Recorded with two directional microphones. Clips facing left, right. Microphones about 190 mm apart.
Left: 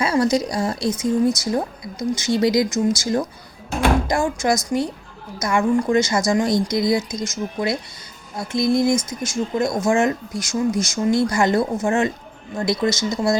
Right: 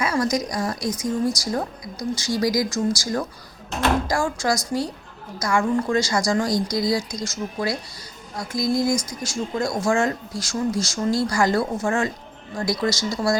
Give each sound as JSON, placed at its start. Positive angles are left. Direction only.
{"t": 0.0, "sound": "speech", "side_deg": 30}